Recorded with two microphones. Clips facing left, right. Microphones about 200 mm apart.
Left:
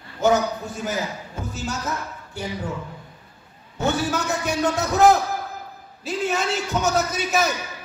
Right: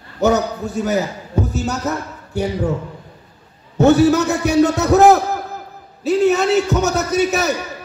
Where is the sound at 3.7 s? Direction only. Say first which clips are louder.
Right 12 dB; 70° right (ahead or behind).